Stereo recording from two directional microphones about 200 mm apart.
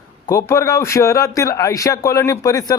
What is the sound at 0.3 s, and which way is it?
A man's voice, 15° left (ahead or behind).